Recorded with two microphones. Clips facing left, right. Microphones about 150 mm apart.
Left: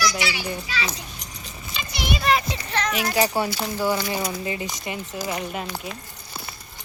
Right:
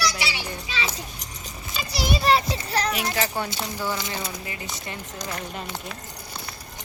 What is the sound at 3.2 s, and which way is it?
Speech, 10° left (ahead or behind).